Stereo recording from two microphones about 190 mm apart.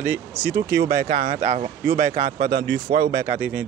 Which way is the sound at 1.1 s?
45° right (ahead or behind).